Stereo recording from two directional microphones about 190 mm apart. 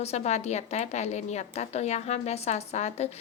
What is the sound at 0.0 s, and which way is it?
A woman's voice, 35° left (ahead or behind).